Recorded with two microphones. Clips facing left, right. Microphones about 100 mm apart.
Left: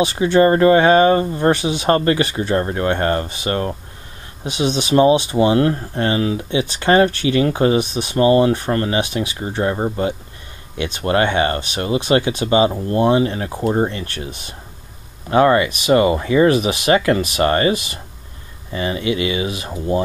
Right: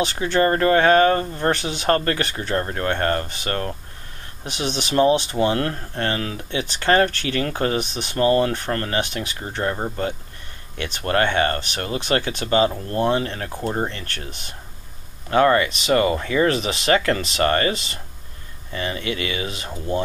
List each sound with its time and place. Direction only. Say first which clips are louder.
0.0 s speech: left 6 dB; 15° left (ahead or behind)